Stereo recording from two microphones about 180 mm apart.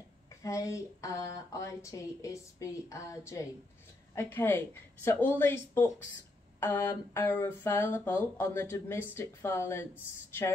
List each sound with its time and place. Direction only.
0.4 s speech: 15° left (ahead or behind)